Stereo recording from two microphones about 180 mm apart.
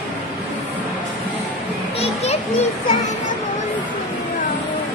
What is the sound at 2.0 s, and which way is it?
Children playing, 35° left (ahead or behind).